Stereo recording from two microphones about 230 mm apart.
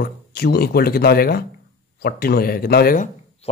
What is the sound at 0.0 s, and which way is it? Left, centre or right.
Speech, left.